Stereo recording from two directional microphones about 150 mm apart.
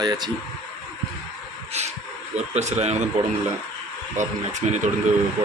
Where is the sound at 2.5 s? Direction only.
50° right (ahead or behind).